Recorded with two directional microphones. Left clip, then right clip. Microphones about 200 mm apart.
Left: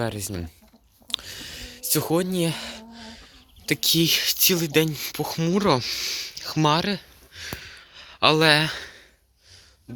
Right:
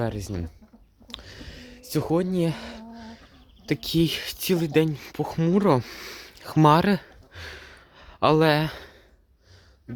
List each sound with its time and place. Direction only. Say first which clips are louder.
0.0 s speech: left 1 dB; 10° right (ahead or behind)
1.0 s a sound: left 10 dB; 10° right (ahead or behind)
3.7 s speech: left 4 dB; 15° right (ahead or behind); by 7.4 s 35° right (ahead or behind)
7.4 s gasp: left 5 dB; 20° right (ahead or behind)